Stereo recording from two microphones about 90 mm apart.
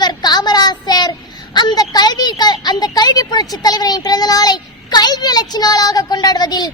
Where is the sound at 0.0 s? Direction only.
50° left (ahead or behind).